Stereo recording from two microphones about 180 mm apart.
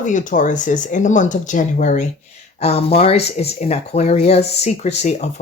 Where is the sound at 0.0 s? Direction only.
45° left (ahead or behind).